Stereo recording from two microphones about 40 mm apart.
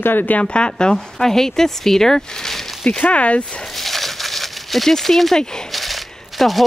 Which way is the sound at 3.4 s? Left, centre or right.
Centre.